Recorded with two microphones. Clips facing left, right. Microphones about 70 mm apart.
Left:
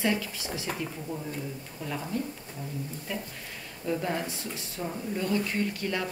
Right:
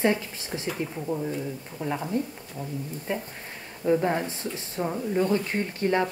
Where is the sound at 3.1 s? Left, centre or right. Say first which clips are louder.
Right 5 dB; right.